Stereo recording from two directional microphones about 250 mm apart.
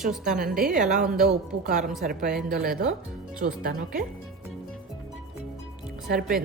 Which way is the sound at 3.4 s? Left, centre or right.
Right.